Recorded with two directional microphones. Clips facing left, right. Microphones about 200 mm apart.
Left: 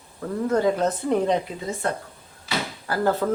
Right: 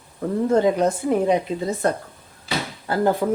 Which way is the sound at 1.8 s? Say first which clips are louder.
Right 5 dB; 40° right (ahead or behind).